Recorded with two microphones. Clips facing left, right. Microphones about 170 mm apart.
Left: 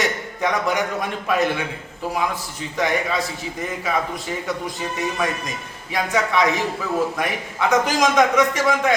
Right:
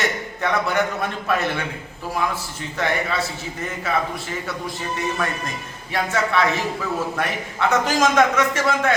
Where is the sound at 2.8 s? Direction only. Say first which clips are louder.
Left 1 dB; 15° left (ahead or behind).